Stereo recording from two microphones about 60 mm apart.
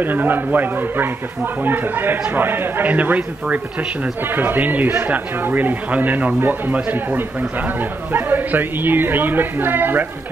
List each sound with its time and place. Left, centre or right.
0.0 s speech: right
4.2 s speech: right